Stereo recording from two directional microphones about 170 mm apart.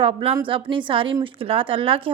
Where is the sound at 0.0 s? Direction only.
35° right (ahead or behind).